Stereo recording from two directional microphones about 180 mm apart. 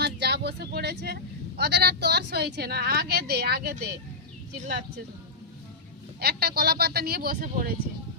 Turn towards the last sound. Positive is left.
turn(degrees=-55)  # may be behind; listen again after turning